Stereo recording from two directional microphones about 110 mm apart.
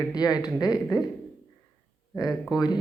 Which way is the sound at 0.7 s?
5° right (ahead or behind).